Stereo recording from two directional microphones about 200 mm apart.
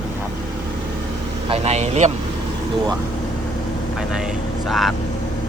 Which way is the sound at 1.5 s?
30° right (ahead or behind).